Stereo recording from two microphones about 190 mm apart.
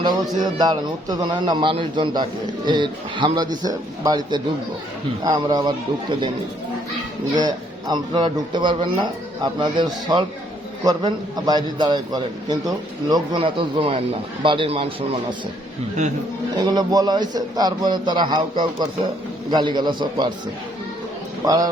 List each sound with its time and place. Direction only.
0.0 s a man's voice: 20° right (ahead or behind)
7.3 s a man's voice: 20° right (ahead or behind)
16.6 s a man's voice: 20° right (ahead or behind)
21.4 s a man's voice: 20° right (ahead or behind)